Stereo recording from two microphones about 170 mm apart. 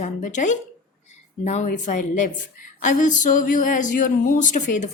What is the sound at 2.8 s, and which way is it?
Speech, 50° left (ahead or behind).